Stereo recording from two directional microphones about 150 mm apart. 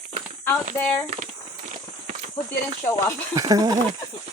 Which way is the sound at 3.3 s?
25° right (ahead or behind).